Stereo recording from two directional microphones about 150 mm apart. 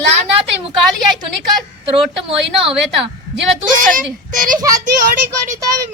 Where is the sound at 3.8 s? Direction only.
65° right (ahead or behind).